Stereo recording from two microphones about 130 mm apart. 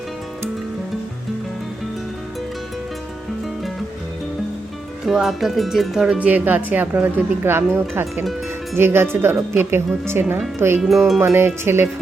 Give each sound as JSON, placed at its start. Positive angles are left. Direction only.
{"t": 5.0, "sound": "speech", "side_deg": 0}
{"t": 10.8, "sound": "speech", "side_deg": 0}
{"t": 11.2, "sound": "music", "side_deg": -20}